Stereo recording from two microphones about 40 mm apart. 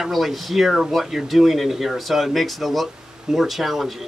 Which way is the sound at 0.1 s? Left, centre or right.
Centre.